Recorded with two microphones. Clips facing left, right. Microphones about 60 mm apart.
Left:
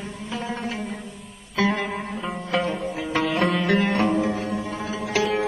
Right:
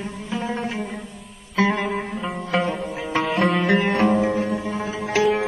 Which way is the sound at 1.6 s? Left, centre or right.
Centre.